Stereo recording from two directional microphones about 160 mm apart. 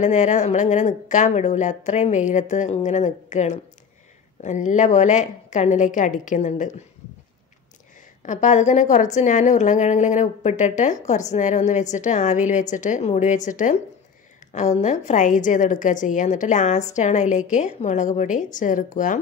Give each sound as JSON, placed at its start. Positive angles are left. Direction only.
{"t": 0.0, "sound": "a woman's voice", "side_deg": 50}
{"t": 8.2, "sound": "a woman's voice", "side_deg": 50}